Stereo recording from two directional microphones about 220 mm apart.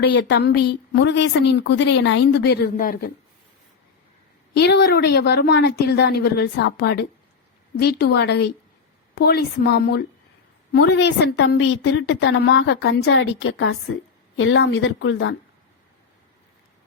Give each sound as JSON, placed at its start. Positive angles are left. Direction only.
{"t": 0.0, "sound": "a woman's voice", "side_deg": 50}
{"t": 4.5, "sound": "a woman's voice", "side_deg": 45}